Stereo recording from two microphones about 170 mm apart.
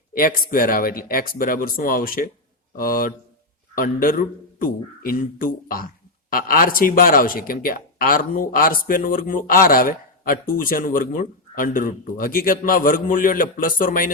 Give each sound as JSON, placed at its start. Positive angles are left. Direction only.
{"t": 0.1, "sound": "speech", "side_deg": 60}